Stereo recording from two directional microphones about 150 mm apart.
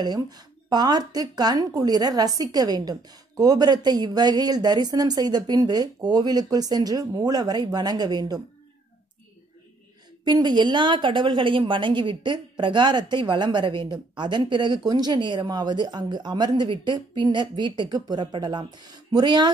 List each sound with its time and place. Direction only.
0.0 s speech: 25° right (ahead or behind)
10.2 s a woman's voice: 30° right (ahead or behind)